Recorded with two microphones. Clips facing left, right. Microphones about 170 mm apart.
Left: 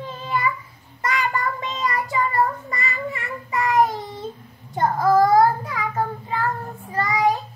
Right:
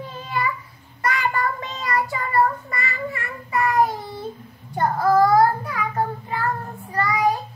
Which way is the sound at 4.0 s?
20° left (ahead or behind).